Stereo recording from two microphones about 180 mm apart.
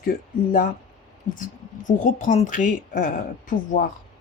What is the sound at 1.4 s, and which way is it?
Speech, 45° left (ahead or behind).